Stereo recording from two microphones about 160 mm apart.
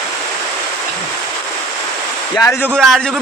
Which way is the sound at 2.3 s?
15° left (ahead or behind).